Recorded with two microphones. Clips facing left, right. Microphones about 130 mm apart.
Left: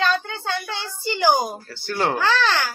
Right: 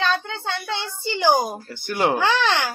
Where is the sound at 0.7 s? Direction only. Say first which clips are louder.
Right 1 dB; 20° right (ahead or behind).